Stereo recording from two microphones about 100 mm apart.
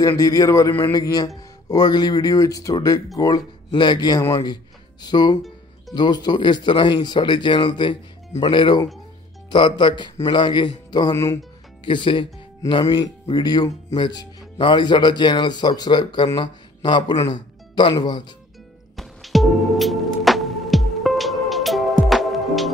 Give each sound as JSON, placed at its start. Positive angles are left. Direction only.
{"t": 0.2, "sound": "speech", "side_deg": 35}
{"t": 12.8, "sound": "speech", "side_deg": 40}
{"t": 17.3, "sound": "music", "side_deg": 50}
{"t": 17.9, "sound": "speech", "side_deg": 45}
{"t": 18.9, "sound": "music", "side_deg": 0}